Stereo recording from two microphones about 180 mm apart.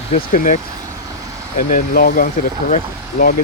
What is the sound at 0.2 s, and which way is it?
Speech, 50° left (ahead or behind).